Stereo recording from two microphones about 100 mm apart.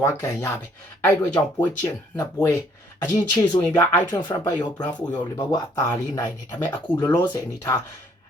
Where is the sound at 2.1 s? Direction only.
40° left (ahead or behind).